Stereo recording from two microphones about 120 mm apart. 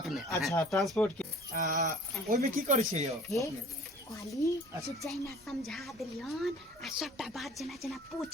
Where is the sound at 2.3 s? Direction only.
80° right.